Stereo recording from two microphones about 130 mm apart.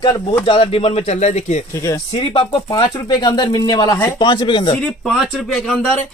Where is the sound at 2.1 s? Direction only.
40° left (ahead or behind).